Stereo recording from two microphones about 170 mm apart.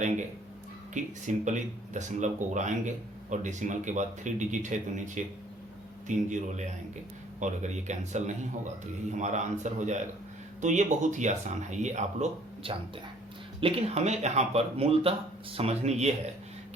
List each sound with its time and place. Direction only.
0.9 s speech: 45° right (ahead or behind)